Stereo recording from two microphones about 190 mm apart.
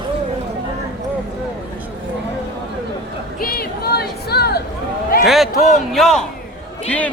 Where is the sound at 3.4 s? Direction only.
55° left (ahead or behind).